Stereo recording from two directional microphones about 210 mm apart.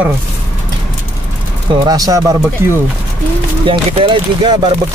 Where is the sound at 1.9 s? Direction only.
15° right (ahead or behind).